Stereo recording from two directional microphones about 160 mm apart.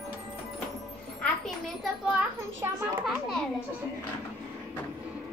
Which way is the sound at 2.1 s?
15° right (ahead or behind).